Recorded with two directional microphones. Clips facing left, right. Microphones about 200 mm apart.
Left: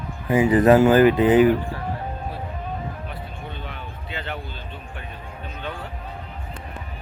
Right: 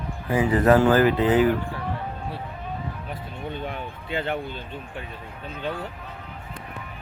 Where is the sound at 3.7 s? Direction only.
50° right (ahead or behind).